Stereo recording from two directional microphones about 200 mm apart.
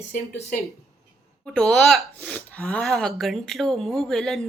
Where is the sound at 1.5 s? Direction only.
Centre (ahead or behind).